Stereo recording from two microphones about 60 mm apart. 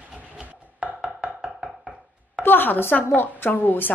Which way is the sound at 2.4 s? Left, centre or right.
Left.